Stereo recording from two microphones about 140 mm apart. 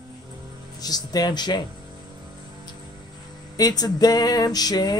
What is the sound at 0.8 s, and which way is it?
Speech, 30° left (ahead or behind).